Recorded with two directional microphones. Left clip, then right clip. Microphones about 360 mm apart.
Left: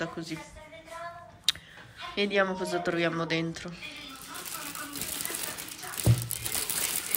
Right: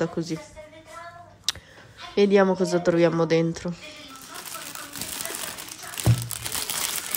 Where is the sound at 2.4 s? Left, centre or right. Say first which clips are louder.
Right 7 dB; centre.